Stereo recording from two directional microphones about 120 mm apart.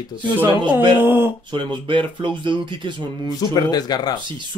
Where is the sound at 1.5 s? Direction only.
45° right (ahead or behind).